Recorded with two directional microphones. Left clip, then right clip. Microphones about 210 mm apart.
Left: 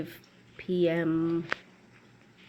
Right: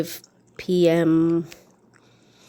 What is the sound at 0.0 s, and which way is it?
Speech, 45° right (ahead or behind).